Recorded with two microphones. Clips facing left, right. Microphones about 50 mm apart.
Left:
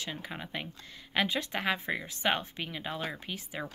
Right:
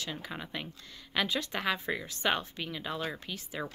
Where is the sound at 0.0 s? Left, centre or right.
Centre.